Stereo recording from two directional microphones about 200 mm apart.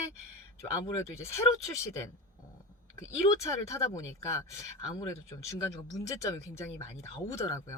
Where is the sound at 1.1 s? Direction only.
15° left (ahead or behind).